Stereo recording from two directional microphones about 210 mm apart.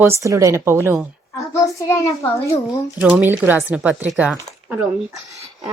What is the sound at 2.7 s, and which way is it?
Speech, 5° right (ahead or behind).